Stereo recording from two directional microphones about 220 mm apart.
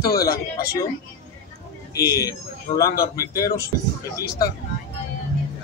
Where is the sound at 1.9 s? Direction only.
15° left (ahead or behind).